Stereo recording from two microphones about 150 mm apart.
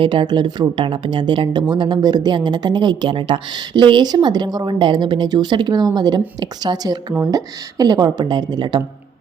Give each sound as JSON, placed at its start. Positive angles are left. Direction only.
{"t": 0.0, "sound": "speech", "side_deg": -35}